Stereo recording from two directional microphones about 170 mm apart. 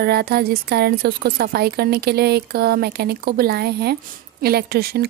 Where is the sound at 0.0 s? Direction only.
65° right (ahead or behind).